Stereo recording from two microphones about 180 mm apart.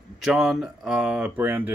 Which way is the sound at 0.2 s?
Centre (ahead or behind).